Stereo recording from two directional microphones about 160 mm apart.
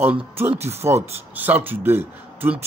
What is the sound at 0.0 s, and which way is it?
Speech, 10° right (ahead or behind).